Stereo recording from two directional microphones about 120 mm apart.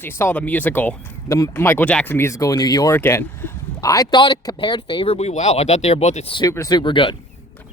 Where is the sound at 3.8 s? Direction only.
30° left (ahead or behind).